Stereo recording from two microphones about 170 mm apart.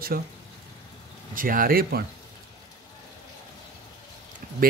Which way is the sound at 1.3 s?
55° right (ahead or behind).